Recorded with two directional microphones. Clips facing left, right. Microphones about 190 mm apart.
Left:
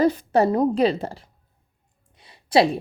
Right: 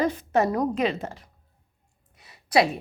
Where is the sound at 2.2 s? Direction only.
30° left (ahead or behind).